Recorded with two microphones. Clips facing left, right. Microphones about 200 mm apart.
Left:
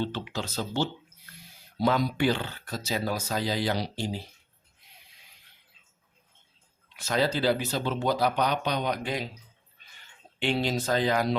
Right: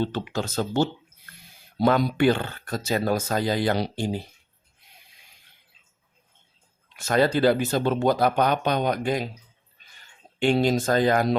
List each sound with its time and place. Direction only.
0.0 s speech: 50° right (ahead or behind)
6.9 s speech: 50° right (ahead or behind)
10.4 s speech: 45° right (ahead or behind)